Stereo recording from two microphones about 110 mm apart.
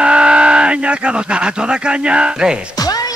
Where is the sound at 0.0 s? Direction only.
10° right (ahead or behind).